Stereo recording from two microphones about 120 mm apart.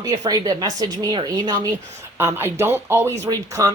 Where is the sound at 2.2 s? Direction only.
20° right (ahead or behind).